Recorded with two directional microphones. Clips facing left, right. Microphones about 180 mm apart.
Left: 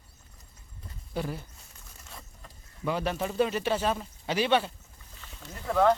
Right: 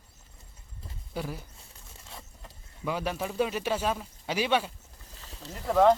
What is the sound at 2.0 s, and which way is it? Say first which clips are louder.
Vehicle: right 1 dB; 25° right (ahead or behind).